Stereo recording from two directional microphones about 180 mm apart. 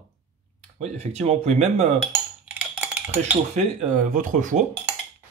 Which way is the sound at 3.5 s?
40° right (ahead or behind).